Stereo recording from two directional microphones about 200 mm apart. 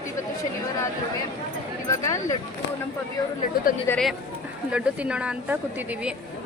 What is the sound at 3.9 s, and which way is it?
A woman's voice, centre (ahead or behind).